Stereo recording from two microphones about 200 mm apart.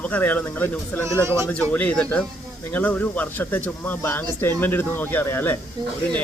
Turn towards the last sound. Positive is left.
turn(degrees=-20)  # may be behind; listen again after turning